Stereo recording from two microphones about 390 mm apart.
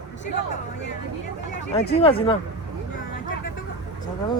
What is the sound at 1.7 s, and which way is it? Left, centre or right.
Speech, centre.